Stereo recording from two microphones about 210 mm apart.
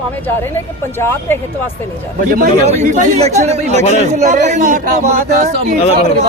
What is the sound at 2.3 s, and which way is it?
Speech, 35° right (ahead or behind).